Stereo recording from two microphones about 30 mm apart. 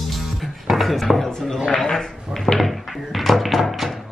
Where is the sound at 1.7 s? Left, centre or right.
Centre.